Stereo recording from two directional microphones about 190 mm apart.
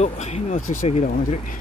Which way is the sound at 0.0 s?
35° left (ahead or behind).